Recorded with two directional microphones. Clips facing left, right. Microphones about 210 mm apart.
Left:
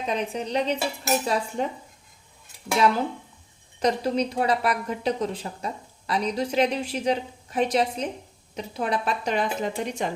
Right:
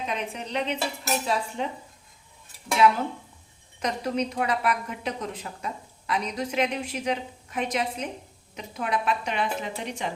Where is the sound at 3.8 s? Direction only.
35° left (ahead or behind).